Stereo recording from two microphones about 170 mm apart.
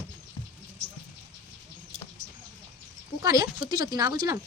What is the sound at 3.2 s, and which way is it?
A woman's voice, 20° right (ahead or behind).